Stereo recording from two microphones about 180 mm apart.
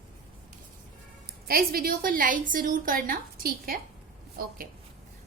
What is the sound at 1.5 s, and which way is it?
A woman's voice, 55° right (ahead or behind).